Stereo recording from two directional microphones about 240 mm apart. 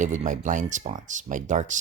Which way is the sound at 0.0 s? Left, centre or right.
Right.